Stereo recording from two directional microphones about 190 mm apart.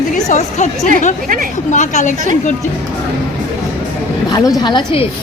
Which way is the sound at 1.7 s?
40° left (ahead or behind).